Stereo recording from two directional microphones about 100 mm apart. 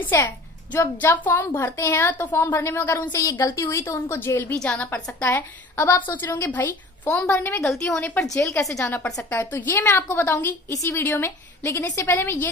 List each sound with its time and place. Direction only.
0.0 s a child's voice: 20° left (ahead or behind)
7.6 s a woman's voice: 5° left (ahead or behind)
8.4 s a child's voice: 30° left (ahead or behind)
9.3 s a child's voice: 20° left (ahead or behind)
10.7 s a woman's voice: 30° left (ahead or behind)
11.0 s a child's voice: 20° left (ahead or behind)